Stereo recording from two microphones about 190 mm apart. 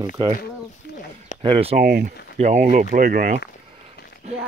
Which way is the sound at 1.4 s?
30° right (ahead or behind).